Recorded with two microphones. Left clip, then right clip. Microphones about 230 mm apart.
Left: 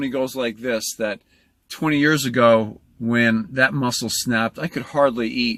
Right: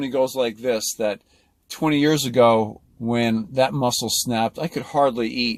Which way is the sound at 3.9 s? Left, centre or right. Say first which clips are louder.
Right 1 dB; centre.